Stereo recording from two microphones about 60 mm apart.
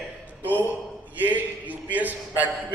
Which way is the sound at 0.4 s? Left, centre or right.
Right.